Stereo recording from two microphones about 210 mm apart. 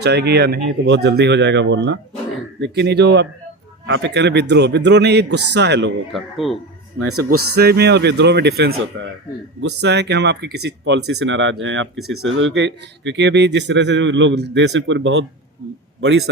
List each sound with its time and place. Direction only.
0.0 s a man's voice: 50° right (ahead or behind)
6.1 s a man's voice: centre (ahead or behind)
7.0 s speech: 90° right
7.5 s a man's voice: 50° right (ahead or behind)
11.9 s a man's voice: centre (ahead or behind)
12.4 s a man's voice: 60° right (ahead or behind)
16.0 s a man's voice: 75° right (ahead or behind)